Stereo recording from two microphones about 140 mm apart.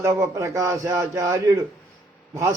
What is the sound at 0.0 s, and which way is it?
A man's voice, 20° right (ahead or behind).